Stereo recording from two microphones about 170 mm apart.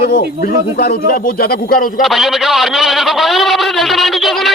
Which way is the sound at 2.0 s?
Centre (ahead or behind).